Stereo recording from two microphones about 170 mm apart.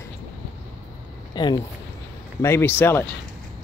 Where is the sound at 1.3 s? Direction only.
25° left (ahead or behind).